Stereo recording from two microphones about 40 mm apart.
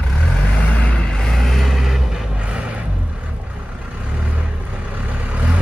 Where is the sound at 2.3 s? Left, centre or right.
Right.